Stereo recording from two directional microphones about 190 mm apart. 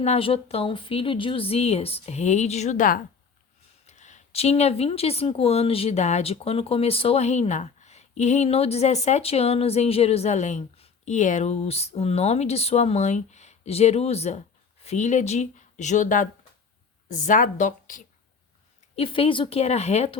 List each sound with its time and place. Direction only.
0.0 s speech: 30° left (ahead or behind)
18.9 s speech: 30° left (ahead or behind)